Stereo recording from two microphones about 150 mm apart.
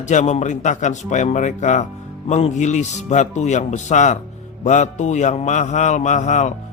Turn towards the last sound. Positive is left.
turn(degrees=55)  # may be behind; listen again after turning